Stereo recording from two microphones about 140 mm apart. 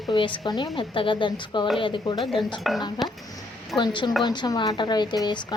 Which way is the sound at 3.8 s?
35° left (ahead or behind).